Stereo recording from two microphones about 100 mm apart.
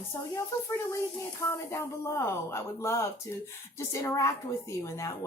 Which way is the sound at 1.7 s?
30° left (ahead or behind).